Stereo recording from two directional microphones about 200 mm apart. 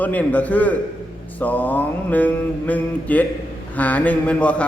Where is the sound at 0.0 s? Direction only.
5° left (ahead or behind).